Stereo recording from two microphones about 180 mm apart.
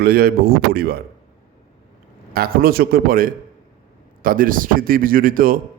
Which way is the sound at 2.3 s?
55° right (ahead or behind).